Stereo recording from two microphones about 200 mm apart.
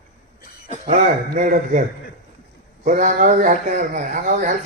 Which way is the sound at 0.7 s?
35° right (ahead or behind).